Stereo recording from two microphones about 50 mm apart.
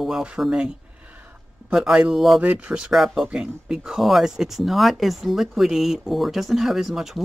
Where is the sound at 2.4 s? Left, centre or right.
Right.